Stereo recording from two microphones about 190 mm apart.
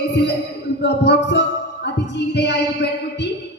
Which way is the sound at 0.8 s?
65° left (ahead or behind).